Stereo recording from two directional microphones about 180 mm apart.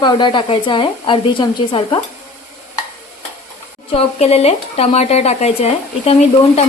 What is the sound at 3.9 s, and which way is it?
Speech, 35° left (ahead or behind).